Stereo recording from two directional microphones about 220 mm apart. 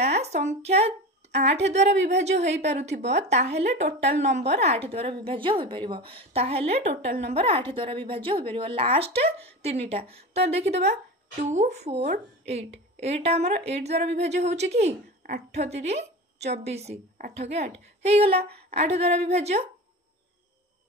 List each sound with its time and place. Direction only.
0.0 s speech: 30° right (ahead or behind)